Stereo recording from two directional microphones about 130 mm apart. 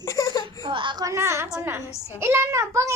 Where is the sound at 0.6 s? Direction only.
40° right (ahead or behind).